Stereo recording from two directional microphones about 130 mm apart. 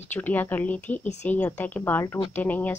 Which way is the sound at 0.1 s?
15° left (ahead or behind).